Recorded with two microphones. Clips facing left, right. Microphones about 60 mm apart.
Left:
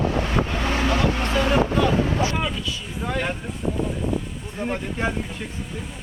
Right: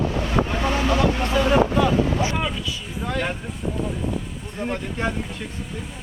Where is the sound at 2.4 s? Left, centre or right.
Centre.